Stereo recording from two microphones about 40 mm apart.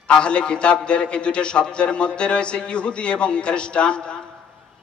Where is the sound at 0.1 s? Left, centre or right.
Left.